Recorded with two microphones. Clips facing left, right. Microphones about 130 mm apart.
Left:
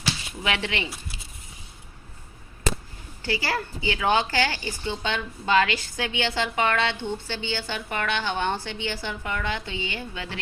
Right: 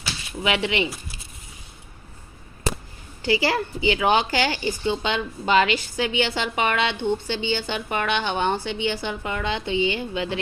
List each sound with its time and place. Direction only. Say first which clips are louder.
0.4 s a woman's voice: right 5 dB; 15° right (ahead or behind)
3.2 s a woman's voice: right 6 dB; 15° right (ahead or behind)